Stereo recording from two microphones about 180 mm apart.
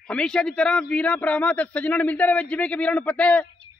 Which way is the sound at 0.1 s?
5° left (ahead or behind).